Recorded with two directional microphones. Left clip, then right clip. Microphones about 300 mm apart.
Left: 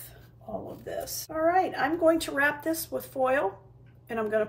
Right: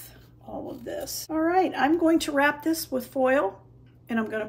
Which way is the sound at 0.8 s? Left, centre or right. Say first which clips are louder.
Right 2 dB; centre.